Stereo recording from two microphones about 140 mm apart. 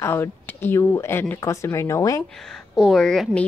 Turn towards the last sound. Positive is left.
turn(degrees=0)  # may be behind; listen again after turning